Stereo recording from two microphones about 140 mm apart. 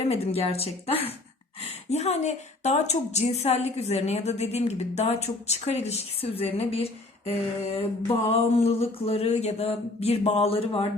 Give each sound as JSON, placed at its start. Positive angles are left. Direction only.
{"t": 0.1, "sound": "speech", "side_deg": 45}